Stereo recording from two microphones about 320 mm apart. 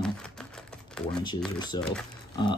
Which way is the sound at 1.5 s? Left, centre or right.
Centre.